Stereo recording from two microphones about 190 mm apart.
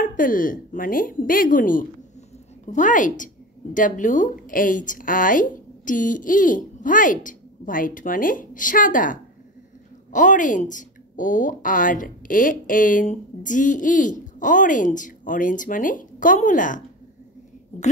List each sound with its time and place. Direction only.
0.0 s a woman's voice: 45° left (ahead or behind)